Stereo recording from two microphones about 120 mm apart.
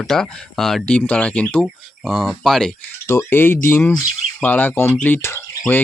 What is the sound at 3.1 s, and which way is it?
Speech, 20° left (ahead or behind).